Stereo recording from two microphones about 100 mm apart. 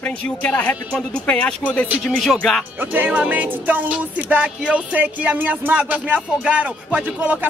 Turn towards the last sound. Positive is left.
turn(degrees=-15)  # may be behind; listen again after turning